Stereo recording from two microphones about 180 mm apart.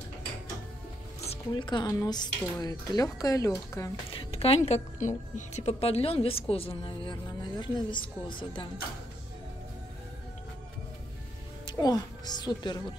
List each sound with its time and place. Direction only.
1.3 s speech: 25° left (ahead or behind)
4.1 s a woman's voice: 30° left (ahead or behind)
11.6 s speech: 20° left (ahead or behind)